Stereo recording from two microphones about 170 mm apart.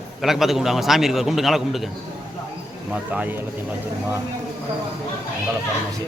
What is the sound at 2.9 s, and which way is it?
Speech, 10° right (ahead or behind).